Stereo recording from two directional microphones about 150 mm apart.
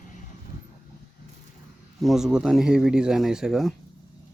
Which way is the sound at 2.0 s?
Centre (ahead or behind).